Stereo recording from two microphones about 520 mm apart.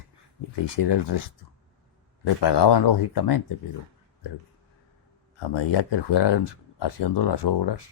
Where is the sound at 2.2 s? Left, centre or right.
Left.